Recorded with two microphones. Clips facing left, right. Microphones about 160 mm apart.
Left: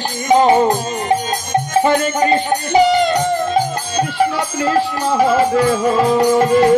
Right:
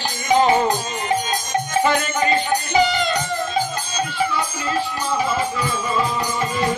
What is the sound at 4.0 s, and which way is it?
Music, 75° left (ahead or behind).